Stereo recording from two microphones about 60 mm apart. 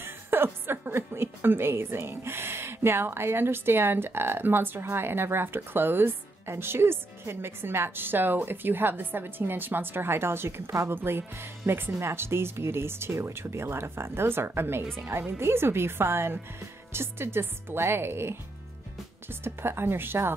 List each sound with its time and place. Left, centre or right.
0.0 s a woman's voice: right